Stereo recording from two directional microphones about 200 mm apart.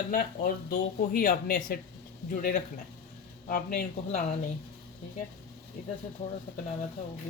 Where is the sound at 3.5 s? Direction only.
40° left (ahead or behind).